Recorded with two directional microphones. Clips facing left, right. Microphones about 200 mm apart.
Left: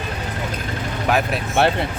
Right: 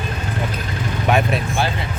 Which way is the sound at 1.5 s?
65° left (ahead or behind).